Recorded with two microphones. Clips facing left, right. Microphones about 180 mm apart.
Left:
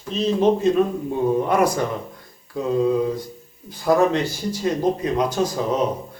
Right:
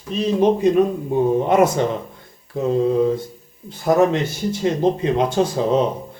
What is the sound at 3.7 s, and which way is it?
Speech, 20° right (ahead or behind).